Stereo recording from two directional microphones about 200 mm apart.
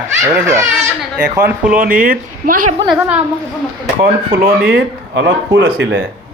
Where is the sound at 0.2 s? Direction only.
15° right (ahead or behind).